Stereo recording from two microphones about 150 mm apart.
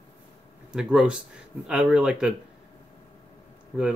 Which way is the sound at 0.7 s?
5° right (ahead or behind).